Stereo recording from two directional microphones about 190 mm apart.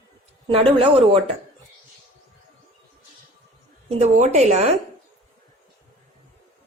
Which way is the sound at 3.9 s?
35° right (ahead or behind).